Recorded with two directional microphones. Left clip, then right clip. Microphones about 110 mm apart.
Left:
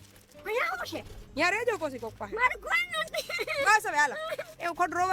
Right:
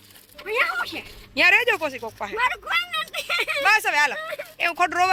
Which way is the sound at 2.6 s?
50° left (ahead or behind).